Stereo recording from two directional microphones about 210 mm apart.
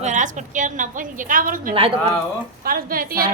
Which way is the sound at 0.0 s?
35° right (ahead or behind).